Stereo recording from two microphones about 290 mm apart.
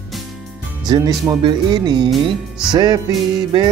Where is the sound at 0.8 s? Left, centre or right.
Centre.